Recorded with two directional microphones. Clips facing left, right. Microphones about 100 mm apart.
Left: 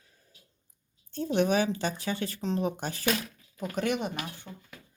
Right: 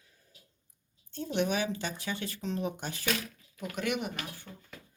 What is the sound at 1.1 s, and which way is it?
Speech, 35° left (ahead or behind).